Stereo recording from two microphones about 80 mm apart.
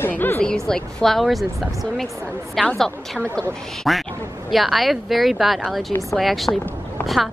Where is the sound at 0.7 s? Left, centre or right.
Centre.